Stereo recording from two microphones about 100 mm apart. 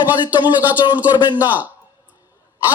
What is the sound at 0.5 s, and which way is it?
A man's voice, 15° right (ahead or behind).